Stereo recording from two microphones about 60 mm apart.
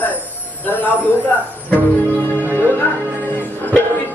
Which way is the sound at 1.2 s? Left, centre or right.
Left.